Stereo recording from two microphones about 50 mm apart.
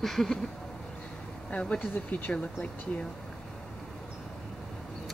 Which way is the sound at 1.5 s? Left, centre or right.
Left.